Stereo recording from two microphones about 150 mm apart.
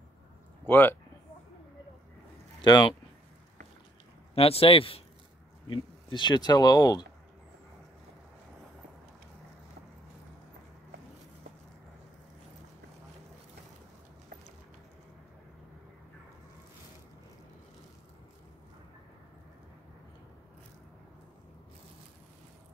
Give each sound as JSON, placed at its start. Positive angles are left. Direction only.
{"t": 0.7, "sound": "speech", "side_deg": 15}
{"t": 2.6, "sound": "speech", "side_deg": 30}
{"t": 4.4, "sound": "speech", "side_deg": 40}